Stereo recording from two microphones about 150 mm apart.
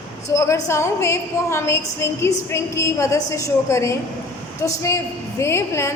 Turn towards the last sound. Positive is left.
turn(degrees=20)  # may be behind; listen again after turning